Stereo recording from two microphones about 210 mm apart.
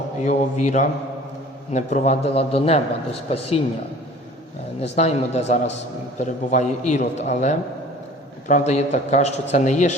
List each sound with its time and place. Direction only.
0.2 s a man's voice: 35° left (ahead or behind)
4.8 s a man's voice: 30° left (ahead or behind)